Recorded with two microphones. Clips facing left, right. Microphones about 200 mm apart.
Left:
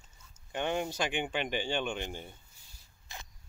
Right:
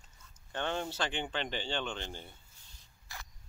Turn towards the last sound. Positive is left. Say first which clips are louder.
# left 1 dB
turn(degrees=20)  # may be behind; listen again after turning